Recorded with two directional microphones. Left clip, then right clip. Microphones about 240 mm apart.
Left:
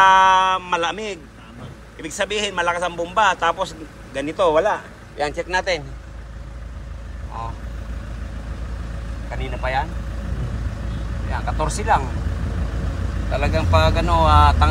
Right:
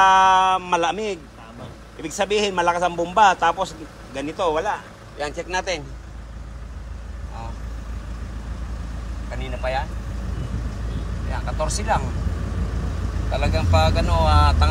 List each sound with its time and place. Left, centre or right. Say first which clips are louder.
0.0 s a sound: left 1 dB; centre
2.0 s a man's voice: right 2 dB; right
9.4 s vehicle: left 2 dB; centre
11.3 s speech: left 2 dB; centre
13.4 s speech: left 2 dB; centre